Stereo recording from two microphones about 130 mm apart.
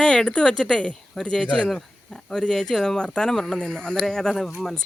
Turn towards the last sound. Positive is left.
turn(degrees=5)  # may be behind; listen again after turning